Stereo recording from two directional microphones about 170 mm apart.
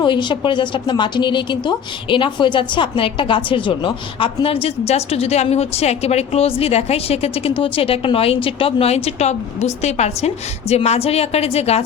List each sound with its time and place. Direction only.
0.0 s speech: 25° left (ahead or behind)